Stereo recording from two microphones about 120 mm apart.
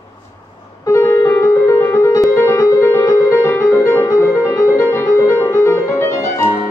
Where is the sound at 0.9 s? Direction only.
25° left (ahead or behind).